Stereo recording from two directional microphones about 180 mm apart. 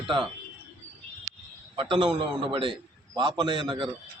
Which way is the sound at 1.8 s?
25° right (ahead or behind).